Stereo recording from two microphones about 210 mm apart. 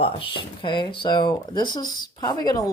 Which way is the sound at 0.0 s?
25° left (ahead or behind).